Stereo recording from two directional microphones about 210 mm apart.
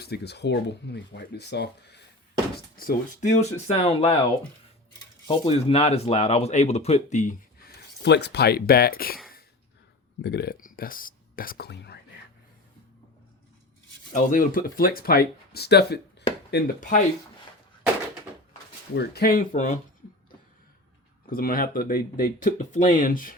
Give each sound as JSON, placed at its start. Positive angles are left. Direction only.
{"t": 0.0, "sound": "speech", "side_deg": 50}
{"t": 2.7, "sound": "speech", "side_deg": 40}
{"t": 5.3, "sound": "speech", "side_deg": 25}
{"t": 8.0, "sound": "speech", "side_deg": 55}
{"t": 10.2, "sound": "speech", "side_deg": 50}
{"t": 14.1, "sound": "speech", "side_deg": 40}
{"t": 18.9, "sound": "speech", "side_deg": 50}
{"t": 21.2, "sound": "speech", "side_deg": 45}